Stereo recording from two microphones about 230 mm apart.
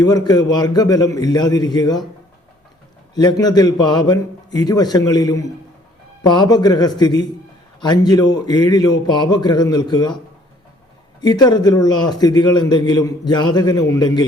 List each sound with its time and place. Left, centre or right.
0.0 s a man's voice: centre
3.2 s a man's voice: centre
11.2 s a man's voice: centre